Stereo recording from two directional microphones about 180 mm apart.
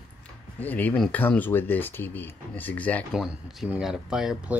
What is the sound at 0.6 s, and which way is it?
Speech, 10° left (ahead or behind).